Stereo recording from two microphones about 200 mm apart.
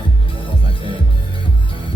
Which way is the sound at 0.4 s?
25° left (ahead or behind).